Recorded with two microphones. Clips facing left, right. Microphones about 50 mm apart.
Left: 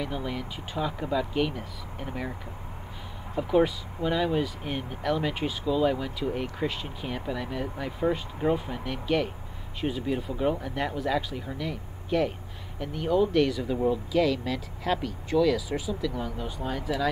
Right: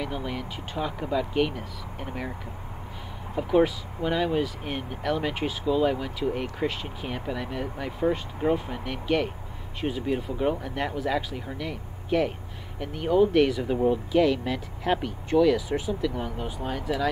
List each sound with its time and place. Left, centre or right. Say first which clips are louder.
0.0 s speech: right 1 dB; centre
3.5 s speech: right 2 dB; centre
15.7 s speech: right 3 dB; right
16.5 s speech: right 1 dB; centre